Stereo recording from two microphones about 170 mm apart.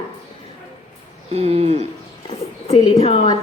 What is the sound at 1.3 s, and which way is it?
Speech, 35° right (ahead or behind).